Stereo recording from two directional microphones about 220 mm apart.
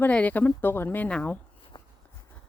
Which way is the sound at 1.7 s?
20° left (ahead or behind).